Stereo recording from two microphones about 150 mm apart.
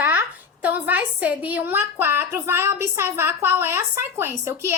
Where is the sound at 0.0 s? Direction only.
10° right (ahead or behind).